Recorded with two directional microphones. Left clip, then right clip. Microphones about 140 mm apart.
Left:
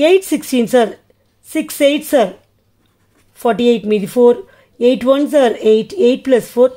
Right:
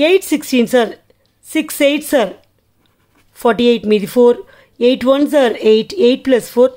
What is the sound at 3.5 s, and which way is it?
Speech, centre (ahead or behind).